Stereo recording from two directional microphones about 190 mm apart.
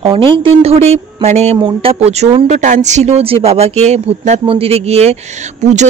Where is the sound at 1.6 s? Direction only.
20° right (ahead or behind).